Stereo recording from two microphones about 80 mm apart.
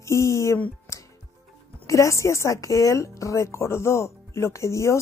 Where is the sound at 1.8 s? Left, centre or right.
Left.